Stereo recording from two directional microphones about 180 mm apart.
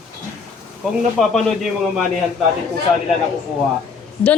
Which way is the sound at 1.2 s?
Centre (ahead or behind).